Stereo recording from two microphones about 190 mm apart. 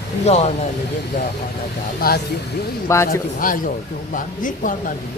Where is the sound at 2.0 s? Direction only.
50° left (ahead or behind).